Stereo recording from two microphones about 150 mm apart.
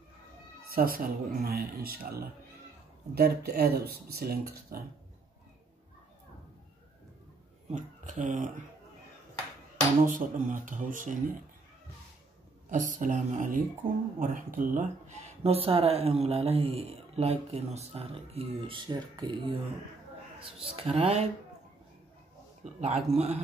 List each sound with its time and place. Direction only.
0.7 s speech: 80° right
7.7 s speech: 55° right (ahead or behind)
10.0 s speech: 60° right (ahead or behind)
12.7 s speech: 60° right (ahead or behind)
13.8 s speech: 70° right (ahead or behind); by 19.6 s 30° right (ahead or behind)
20.6 s speech: 40° right (ahead or behind)
22.8 s speech: 45° right (ahead or behind)